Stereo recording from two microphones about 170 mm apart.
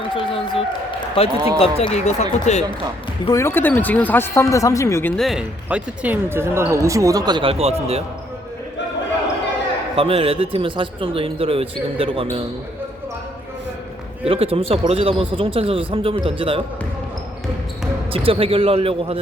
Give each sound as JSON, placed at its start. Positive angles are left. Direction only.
{"t": 0.1, "sound": "a sound", "side_deg": 30}
{"t": 1.8, "sound": "speech", "side_deg": 40}
{"t": 3.2, "sound": "speech", "side_deg": 15}
{"t": 5.1, "sound": "speech", "side_deg": 0}
{"t": 9.9, "sound": "speech", "side_deg": -35}
{"t": 14.3, "sound": "speech", "side_deg": -35}
{"t": 18.1, "sound": "speech", "side_deg": -30}